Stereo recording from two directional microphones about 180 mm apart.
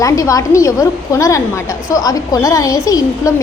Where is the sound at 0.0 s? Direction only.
20° left (ahead or behind).